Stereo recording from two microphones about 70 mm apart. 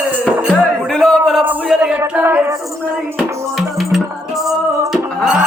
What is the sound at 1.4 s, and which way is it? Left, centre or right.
Speech, right.